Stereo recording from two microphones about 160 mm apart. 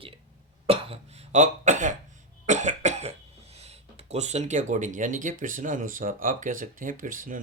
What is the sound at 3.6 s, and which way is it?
Speech, 40° right (ahead or behind).